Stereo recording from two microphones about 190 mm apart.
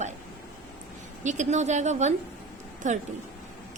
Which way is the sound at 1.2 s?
40° right (ahead or behind).